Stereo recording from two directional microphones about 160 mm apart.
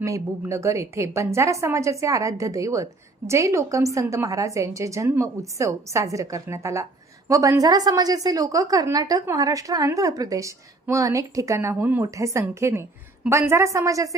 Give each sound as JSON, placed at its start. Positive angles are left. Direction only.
{"t": 0.0, "sound": "a woman's voice", "side_deg": -20}